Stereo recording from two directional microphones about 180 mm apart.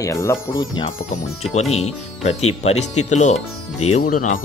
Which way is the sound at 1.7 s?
35° left (ahead or behind).